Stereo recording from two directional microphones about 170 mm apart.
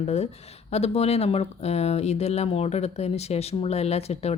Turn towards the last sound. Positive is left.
turn(degrees=40)  # may be behind; listen again after turning